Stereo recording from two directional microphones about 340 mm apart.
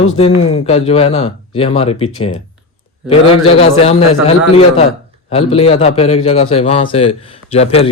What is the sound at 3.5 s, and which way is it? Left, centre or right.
A man's voice, centre.